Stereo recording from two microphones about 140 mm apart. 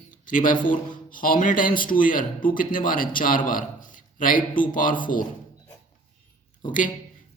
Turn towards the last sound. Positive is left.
turn(degrees=70)  # may be behind; listen again after turning